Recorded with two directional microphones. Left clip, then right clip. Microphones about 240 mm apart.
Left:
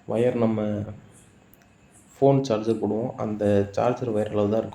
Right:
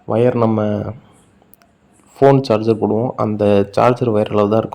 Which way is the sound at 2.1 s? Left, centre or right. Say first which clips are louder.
Right 9 dB; right.